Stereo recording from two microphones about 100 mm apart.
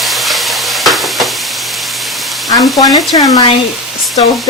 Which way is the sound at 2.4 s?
40° left (ahead or behind).